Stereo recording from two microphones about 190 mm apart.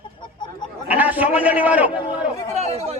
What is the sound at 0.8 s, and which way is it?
A man's voice, 10° right (ahead or behind).